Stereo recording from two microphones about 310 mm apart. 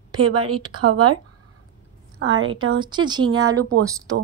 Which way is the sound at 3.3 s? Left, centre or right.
Right.